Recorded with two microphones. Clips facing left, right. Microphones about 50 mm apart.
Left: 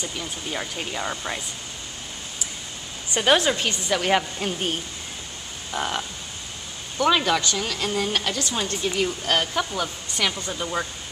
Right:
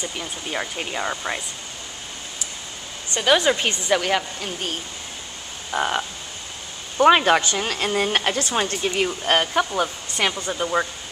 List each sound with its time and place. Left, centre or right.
0.0 s speech: centre
3.2 s speech: centre
3.4 s a woman's voice: centre
5.7 s a woman's voice: centre
7.0 s a woman's voice: right; by 10.9 s centre